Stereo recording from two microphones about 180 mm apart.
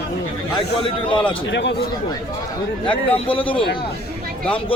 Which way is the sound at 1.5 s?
80° left.